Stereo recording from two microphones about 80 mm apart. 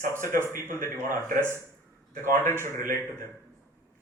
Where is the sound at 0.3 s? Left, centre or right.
Right.